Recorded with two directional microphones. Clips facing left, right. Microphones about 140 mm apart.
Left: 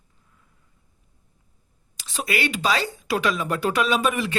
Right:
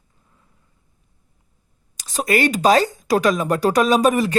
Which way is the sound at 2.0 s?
40° right (ahead or behind).